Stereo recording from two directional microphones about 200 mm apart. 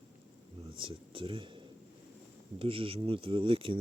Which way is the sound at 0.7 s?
25° right (ahead or behind).